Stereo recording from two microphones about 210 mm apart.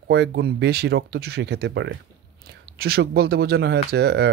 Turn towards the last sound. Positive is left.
turn(degrees=-55)  # may be behind; listen again after turning